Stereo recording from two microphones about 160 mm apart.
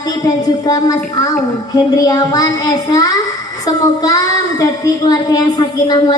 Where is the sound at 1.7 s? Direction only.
25° left (ahead or behind).